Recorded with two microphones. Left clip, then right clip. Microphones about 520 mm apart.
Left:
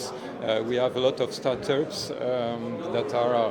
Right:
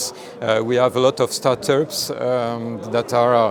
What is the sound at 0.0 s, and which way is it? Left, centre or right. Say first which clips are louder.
Speech: right 6 dB; right.